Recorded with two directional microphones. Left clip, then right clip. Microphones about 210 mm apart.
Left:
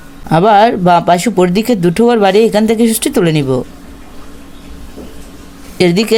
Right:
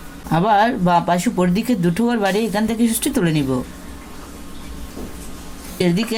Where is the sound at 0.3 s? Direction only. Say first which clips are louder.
Left 8 dB; 55° left (ahead or behind).